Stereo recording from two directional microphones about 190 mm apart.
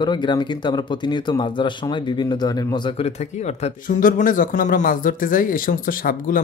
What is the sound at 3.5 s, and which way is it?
Speech, 40° left (ahead or behind).